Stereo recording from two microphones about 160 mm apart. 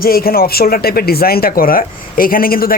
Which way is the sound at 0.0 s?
70° left (ahead or behind).